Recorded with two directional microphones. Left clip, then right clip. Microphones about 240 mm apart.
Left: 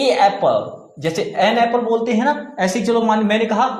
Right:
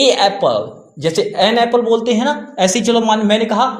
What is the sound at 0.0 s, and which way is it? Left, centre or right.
A man's voice, right.